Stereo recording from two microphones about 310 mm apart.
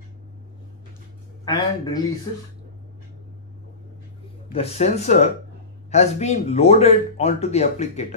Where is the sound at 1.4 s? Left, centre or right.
Centre.